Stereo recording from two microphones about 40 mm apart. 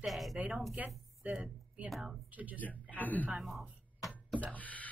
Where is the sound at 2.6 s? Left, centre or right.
Left.